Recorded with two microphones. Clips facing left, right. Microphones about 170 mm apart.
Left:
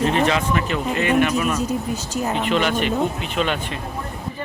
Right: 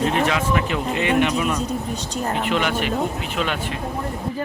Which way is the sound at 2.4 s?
10° right (ahead or behind).